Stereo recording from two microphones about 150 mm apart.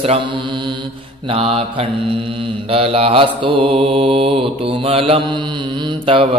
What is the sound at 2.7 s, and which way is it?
Mantra, 40° right (ahead or behind).